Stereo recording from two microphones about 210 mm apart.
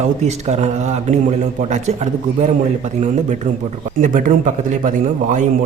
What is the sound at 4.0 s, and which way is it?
Speech, 40° right (ahead or behind).